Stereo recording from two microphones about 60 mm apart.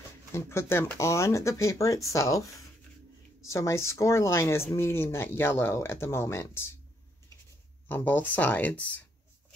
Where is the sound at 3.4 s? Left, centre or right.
Left.